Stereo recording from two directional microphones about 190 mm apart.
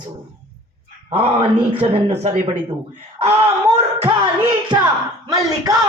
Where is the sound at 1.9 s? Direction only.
30° right (ahead or behind).